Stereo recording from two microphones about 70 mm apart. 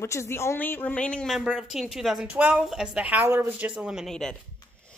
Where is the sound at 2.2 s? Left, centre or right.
Centre.